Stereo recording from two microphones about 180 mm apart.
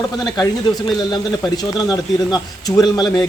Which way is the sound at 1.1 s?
20° left (ahead or behind).